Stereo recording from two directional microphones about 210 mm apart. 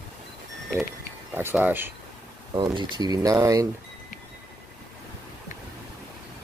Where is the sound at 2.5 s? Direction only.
20° right (ahead or behind).